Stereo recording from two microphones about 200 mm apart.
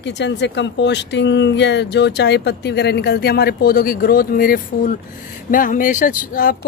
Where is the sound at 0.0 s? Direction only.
60° left (ahead or behind).